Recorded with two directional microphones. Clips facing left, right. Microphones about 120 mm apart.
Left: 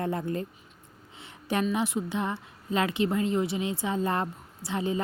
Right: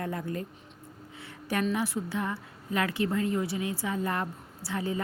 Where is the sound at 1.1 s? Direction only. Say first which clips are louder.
Left 2 dB; 20° left (ahead or behind).